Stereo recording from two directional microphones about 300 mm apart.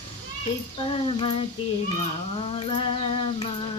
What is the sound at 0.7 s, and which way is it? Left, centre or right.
Speech, centre.